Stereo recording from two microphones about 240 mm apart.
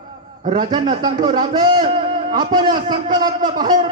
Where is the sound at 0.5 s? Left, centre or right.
Centre.